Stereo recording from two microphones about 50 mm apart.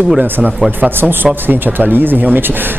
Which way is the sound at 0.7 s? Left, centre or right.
Right.